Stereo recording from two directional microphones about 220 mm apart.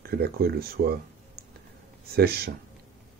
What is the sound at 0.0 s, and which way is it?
Speech, 45° right (ahead or behind).